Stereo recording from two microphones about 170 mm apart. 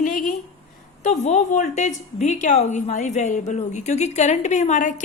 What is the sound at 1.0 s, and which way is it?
A woman's voice, 45° left (ahead or behind).